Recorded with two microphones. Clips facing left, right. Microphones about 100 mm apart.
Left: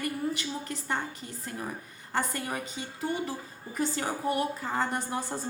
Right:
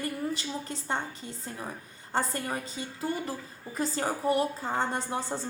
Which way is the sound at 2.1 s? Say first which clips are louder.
Right 1 dB; 30° right (ahead or behind).